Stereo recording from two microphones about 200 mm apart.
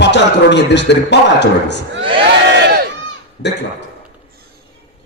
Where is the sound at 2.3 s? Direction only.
60° right (ahead or behind).